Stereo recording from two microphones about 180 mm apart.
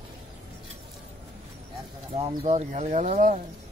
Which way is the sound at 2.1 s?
35° right (ahead or behind).